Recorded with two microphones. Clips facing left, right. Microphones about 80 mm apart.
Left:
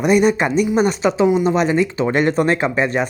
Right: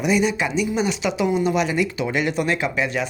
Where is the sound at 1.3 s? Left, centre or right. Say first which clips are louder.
Left 5 dB; left.